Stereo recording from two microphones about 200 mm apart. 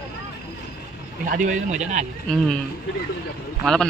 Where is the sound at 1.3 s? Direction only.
40° right (ahead or behind).